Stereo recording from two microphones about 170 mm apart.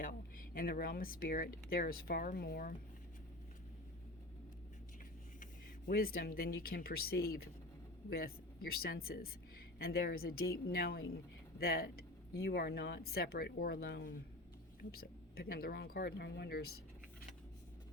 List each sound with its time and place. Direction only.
0.0 s speech: 55° left (ahead or behind)
5.9 s speech: 60° left (ahead or behind)